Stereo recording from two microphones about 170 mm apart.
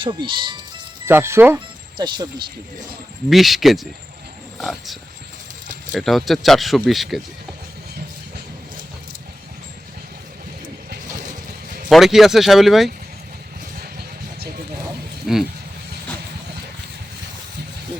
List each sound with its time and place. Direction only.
0.0 s speech: 30° right (ahead or behind)
1.0 s speech: 15° right (ahead or behind)
2.0 s speech: 25° right (ahead or behind)
3.2 s speech: centre (ahead or behind)
11.3 s a sound: 50° right (ahead or behind)
11.9 s speech: centre (ahead or behind)